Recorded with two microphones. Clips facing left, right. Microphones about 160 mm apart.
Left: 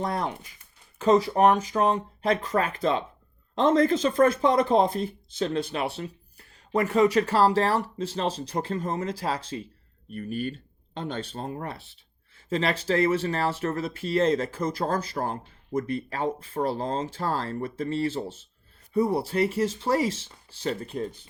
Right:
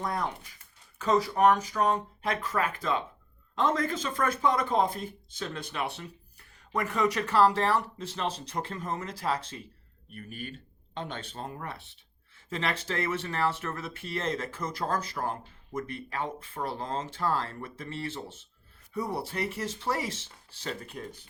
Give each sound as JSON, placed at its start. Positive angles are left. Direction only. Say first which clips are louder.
{"t": 0.0, "sound": "speech", "louder": "left 3 dB", "side_deg": 30}